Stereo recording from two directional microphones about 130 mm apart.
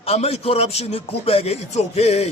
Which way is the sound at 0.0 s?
50° left (ahead or behind).